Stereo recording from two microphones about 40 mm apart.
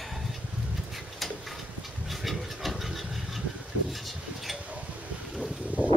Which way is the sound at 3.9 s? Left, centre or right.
Centre.